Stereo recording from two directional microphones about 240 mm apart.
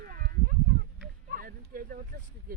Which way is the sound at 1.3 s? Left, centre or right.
Right.